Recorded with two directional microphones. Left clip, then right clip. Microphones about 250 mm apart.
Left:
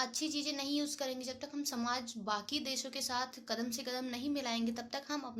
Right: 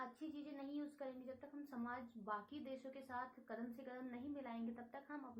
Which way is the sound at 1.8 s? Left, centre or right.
Left.